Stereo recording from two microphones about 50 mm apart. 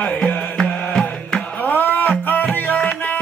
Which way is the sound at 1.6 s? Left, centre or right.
Left.